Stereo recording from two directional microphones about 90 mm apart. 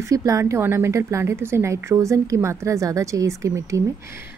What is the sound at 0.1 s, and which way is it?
A woman's voice, 35° right (ahead or behind).